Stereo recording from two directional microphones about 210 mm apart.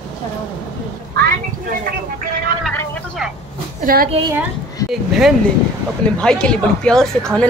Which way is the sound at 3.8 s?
45° right (ahead or behind).